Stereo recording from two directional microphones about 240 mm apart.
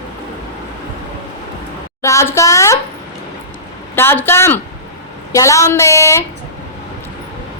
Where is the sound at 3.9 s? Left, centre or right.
Centre.